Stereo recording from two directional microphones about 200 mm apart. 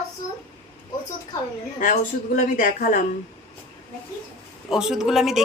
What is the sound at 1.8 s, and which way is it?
Speech, 40° left (ahead or behind).